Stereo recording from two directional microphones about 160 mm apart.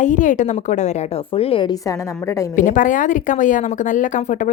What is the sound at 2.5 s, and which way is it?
A woman's voice, 55° left (ahead or behind).